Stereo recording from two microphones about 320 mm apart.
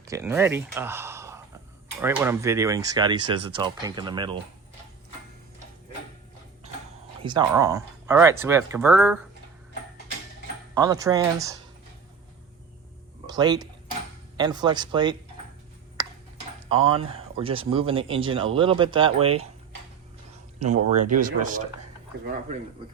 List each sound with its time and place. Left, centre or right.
0.0 s speech: centre
7.2 s speech: centre
10.8 s speech: centre
13.2 s speech: centre
16.0 s tick-tock: centre
16.6 s speech: centre
21.1 s speech: right